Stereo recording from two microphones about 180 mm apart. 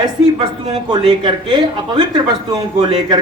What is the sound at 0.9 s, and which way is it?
A man's voice, 25° right (ahead or behind).